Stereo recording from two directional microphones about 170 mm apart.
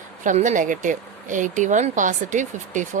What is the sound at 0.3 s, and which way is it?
Speech, 50° right (ahead or behind).